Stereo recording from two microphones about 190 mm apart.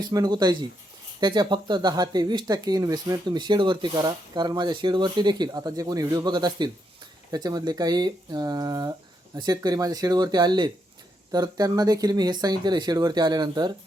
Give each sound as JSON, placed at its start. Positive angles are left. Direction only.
{"t": 0.0, "sound": "speech", "side_deg": -20}